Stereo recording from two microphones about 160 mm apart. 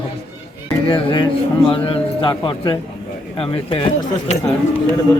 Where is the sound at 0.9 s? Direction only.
35° left (ahead or behind).